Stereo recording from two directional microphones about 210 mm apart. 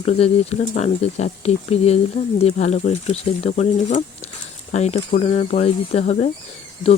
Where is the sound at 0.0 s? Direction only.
30° left (ahead or behind).